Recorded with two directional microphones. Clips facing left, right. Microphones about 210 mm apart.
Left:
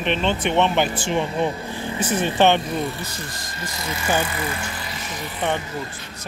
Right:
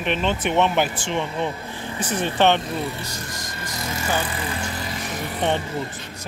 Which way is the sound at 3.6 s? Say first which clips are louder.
Left 1 dB; 50° right (ahead or behind).